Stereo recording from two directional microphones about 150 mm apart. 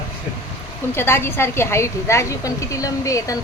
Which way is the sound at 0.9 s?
15° left (ahead or behind).